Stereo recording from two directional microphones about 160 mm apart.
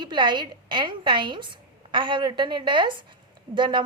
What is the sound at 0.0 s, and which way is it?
A woman's voice, 30° right (ahead or behind).